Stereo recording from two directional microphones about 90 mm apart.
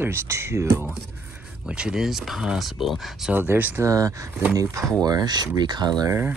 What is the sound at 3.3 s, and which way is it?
Mantra, 20° right (ahead or behind).